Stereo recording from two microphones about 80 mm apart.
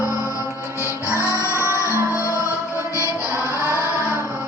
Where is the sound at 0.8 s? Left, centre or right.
Left.